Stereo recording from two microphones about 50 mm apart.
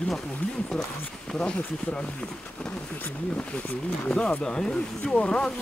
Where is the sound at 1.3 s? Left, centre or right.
Centre.